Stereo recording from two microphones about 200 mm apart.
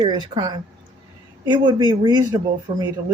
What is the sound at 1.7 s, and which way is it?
Speech, 20° right (ahead or behind).